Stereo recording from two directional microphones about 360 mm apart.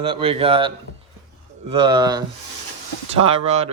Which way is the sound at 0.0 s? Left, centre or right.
Centre.